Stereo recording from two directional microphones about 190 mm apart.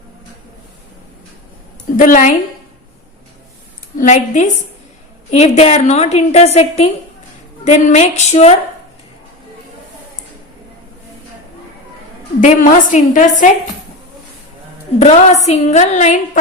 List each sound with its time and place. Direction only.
2.0 s a woman's voice: 45° left (ahead or behind)
3.9 s a woman's voice: 40° left (ahead or behind)
12.4 s a woman's voice: 45° left (ahead or behind)
14.9 s a woman's voice: 35° left (ahead or behind)